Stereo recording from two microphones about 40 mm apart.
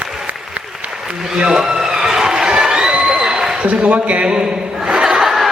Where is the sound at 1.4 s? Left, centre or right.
Centre.